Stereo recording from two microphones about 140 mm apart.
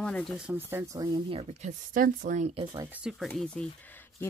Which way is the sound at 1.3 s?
50° right (ahead or behind).